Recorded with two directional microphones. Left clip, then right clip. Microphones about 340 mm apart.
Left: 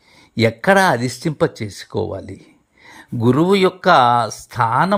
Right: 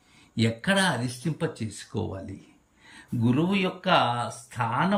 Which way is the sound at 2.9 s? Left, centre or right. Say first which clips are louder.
Left 10 dB; centre.